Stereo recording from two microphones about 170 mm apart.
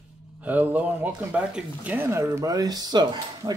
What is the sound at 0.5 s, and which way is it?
Speech, 10° right (ahead or behind).